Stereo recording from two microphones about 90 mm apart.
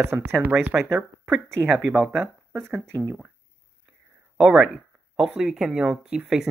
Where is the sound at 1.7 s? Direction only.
5° right (ahead or behind).